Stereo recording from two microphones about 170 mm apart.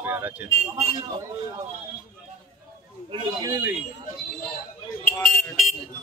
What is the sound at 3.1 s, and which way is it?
Speech, 25° right (ahead or behind).